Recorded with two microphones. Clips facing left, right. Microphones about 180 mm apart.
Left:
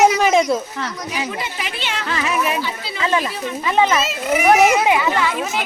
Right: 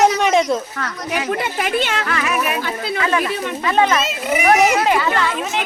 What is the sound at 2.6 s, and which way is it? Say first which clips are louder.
Speech: right 4 dB; 50° right (ahead or behind).